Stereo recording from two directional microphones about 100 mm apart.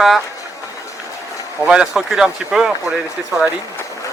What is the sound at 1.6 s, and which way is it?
Speech, 10° right (ahead or behind).